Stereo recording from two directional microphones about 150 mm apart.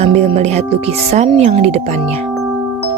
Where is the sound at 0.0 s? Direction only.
45° right (ahead or behind).